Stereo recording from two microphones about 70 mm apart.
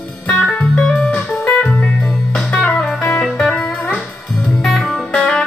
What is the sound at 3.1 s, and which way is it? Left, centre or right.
Music, centre.